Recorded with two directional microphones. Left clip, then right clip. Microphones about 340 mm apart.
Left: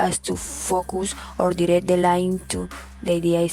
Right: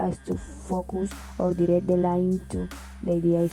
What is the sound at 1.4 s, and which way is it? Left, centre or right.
Speech, left.